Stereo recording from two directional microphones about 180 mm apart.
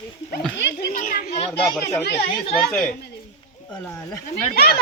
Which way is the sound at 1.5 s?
5° left (ahead or behind).